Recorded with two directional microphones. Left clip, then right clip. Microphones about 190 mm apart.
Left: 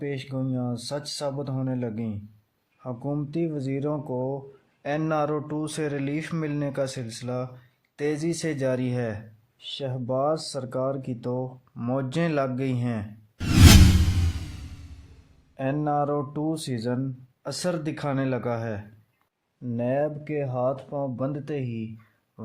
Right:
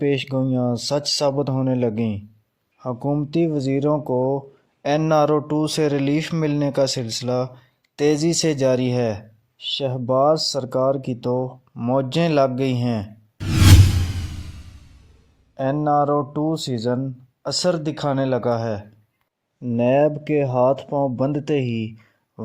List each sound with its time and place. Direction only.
0.0 s speech: 45° right (ahead or behind)
2.7 s speech: 25° right (ahead or behind)
15.8 s speech: 25° right (ahead or behind)